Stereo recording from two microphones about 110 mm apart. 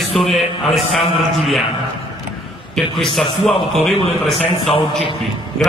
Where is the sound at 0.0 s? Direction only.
Centre (ahead or behind).